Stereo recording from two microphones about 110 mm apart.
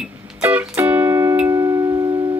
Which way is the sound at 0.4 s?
15° right (ahead or behind).